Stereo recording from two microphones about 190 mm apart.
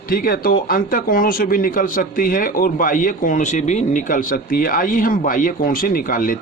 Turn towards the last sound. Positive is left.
turn(degrees=45)  # may be behind; listen again after turning